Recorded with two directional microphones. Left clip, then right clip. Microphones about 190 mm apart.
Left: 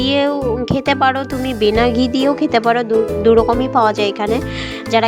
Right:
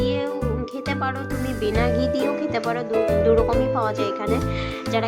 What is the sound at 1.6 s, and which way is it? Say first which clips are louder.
Speech: left 8 dB; 35° left (ahead or behind).